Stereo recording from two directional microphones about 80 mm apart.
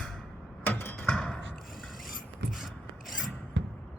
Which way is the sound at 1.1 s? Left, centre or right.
Centre.